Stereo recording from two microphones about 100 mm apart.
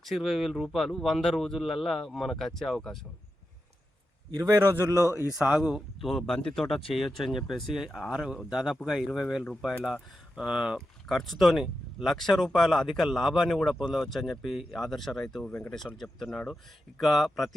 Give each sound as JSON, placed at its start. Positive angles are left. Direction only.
{"t": 0.0, "sound": "speech", "side_deg": 0}
{"t": 4.4, "sound": "a man's voice", "side_deg": -20}
{"t": 4.9, "sound": "speech", "side_deg": 30}
{"t": 5.5, "sound": "speech", "side_deg": -5}
{"t": 6.1, "sound": "speech", "side_deg": 10}